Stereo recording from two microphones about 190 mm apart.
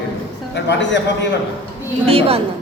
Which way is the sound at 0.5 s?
65° left (ahead or behind).